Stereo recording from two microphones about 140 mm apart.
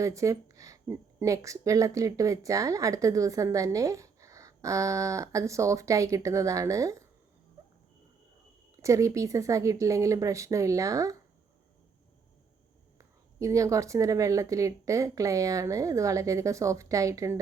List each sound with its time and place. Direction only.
0.0 s speech: 20° right (ahead or behind)
8.7 s speech: 20° right (ahead or behind)
13.0 s speech: 20° right (ahead or behind)